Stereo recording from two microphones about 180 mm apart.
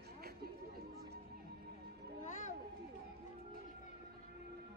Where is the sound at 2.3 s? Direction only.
45° left (ahead or behind).